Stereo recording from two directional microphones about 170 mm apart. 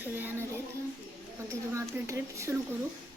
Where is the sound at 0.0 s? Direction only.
10° right (ahead or behind).